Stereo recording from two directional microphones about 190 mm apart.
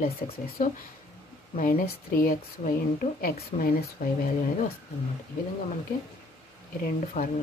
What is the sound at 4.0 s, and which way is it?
Speech, 50° left (ahead or behind).